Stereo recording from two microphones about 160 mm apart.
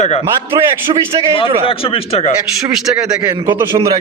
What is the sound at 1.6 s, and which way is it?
Speech, 35° left (ahead or behind).